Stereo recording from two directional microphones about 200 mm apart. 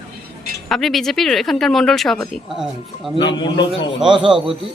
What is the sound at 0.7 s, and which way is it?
Speech, centre (ahead or behind).